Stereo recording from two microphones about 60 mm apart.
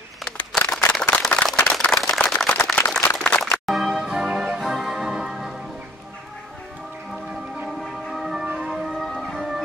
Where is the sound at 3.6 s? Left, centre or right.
Centre.